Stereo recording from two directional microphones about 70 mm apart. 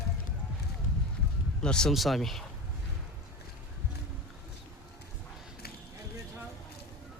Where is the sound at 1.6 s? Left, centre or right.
Centre.